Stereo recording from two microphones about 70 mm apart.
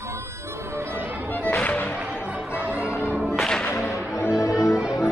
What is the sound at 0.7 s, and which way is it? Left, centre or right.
Music, right.